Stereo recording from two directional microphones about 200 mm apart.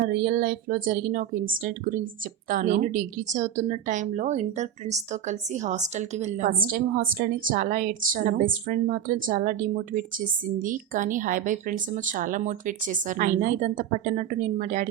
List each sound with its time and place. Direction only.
0.1 s a woman's voice: 45° right (ahead or behind)